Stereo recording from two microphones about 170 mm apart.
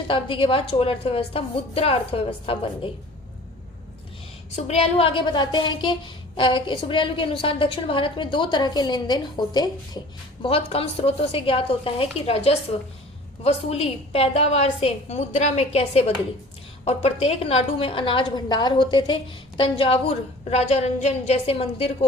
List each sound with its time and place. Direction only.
0.1 s a woman's voice: 30° left (ahead or behind)
4.5 s a woman's voice: 40° left (ahead or behind)